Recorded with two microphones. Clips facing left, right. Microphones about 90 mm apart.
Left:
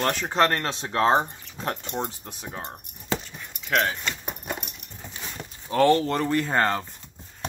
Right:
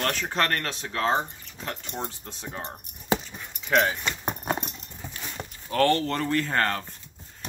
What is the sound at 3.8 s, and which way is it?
Speech, 10° right (ahead or behind).